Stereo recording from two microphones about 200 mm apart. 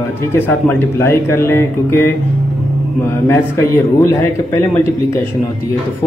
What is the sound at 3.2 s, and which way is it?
Speech, 15° left (ahead or behind).